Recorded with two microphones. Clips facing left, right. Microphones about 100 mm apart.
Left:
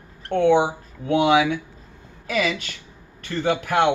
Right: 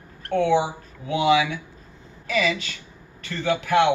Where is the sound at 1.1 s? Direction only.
55° left (ahead or behind).